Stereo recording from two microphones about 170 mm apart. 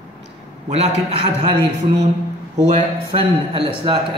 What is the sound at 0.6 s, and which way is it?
Speech, 40° right (ahead or behind).